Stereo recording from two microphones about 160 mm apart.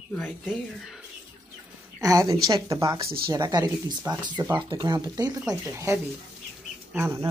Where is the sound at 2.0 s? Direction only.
20° right (ahead or behind).